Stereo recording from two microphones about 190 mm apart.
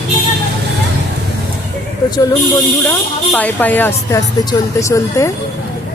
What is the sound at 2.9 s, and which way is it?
Speech, 10° left (ahead or behind).